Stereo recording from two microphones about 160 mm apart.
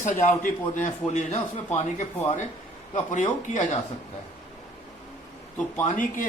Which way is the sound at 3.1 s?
50° left (ahead or behind).